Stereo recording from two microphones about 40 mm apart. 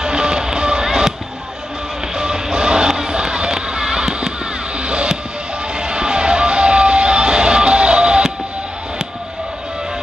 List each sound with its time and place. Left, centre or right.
0.0 s music: centre
2.1 s music: centre